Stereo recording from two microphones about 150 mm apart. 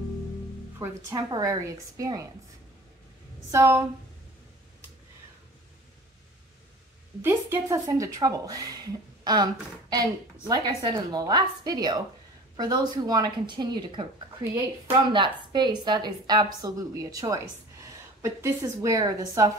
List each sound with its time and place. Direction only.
0.7 s speech: 25° right (ahead or behind)
3.5 s speech: 20° right (ahead or behind)
7.2 s speech: 15° right (ahead or behind)
15.0 s speech: 30° right (ahead or behind)